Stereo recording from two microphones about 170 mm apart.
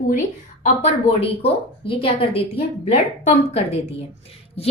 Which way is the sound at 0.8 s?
35° left (ahead or behind).